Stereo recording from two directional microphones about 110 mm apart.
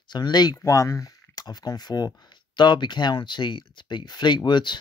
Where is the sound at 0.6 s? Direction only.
30° left (ahead or behind).